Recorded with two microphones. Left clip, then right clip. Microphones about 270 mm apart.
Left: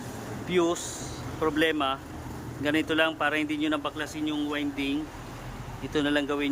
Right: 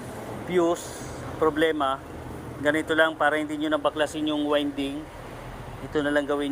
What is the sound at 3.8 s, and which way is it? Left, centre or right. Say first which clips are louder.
Speech: right 7 dB; left.